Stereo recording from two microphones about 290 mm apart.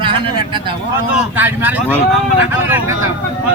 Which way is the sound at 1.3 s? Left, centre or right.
Centre.